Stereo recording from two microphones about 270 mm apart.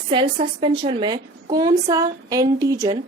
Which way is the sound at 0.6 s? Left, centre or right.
Centre.